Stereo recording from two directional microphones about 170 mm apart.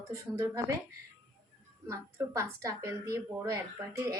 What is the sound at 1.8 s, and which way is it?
Speech, 15° right (ahead or behind).